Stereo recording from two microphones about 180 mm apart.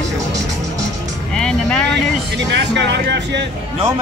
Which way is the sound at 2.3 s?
75° right (ahead or behind).